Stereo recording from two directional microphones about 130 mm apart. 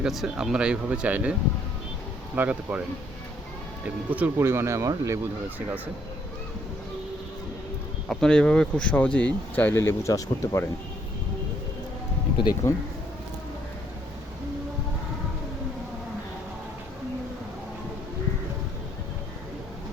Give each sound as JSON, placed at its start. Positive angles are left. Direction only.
{"t": 0.0, "sound": "speech", "side_deg": -5}
{"t": 3.8, "sound": "speech", "side_deg": -10}
{"t": 8.1, "sound": "speech", "side_deg": 5}
{"t": 12.4, "sound": "speech", "side_deg": 30}